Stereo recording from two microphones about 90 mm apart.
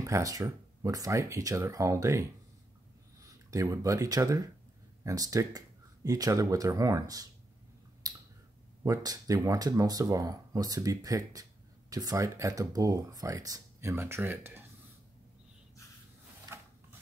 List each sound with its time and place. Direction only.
0.0 s speech: 40° right (ahead or behind)
3.4 s speech: 35° right (ahead or behind)
8.0 s clicking: 45° right (ahead or behind)
8.8 s speech: 40° right (ahead or behind)
13.7 s speech: 30° right (ahead or behind)